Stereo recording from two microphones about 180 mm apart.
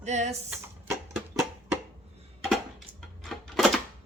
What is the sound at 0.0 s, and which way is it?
Speech, 40° right (ahead or behind).